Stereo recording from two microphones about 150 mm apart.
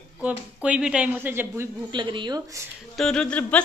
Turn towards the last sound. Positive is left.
turn(degrees=10)  # may be behind; listen again after turning